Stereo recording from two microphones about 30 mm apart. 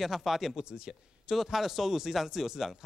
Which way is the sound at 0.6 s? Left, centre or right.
Right.